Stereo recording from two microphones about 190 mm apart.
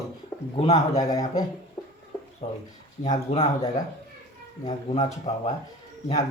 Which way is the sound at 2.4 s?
35° left (ahead or behind).